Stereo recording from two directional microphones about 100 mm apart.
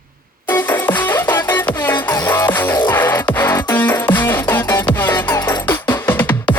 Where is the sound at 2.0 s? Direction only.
40° left (ahead or behind).